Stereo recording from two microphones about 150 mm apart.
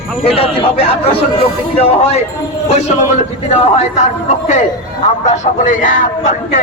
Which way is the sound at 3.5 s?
45° left (ahead or behind).